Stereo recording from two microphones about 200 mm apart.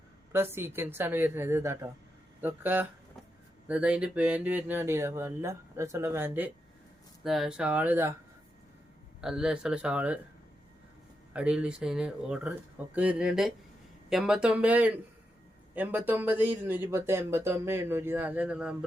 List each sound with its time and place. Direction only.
0.3 s speech: 10° right (ahead or behind)
9.2 s speech: 5° right (ahead or behind)
11.3 s speech: 5° right (ahead or behind)